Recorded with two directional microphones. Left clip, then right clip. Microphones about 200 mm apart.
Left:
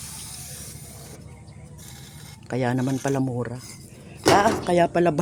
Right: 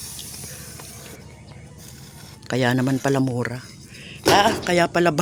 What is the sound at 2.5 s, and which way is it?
Speech, 5° right (ahead or behind).